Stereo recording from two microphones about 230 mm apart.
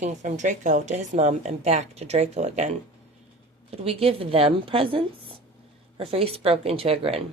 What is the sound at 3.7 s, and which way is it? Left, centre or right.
Speech, right.